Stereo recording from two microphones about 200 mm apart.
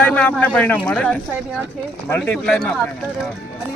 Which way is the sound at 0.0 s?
5° left (ahead or behind).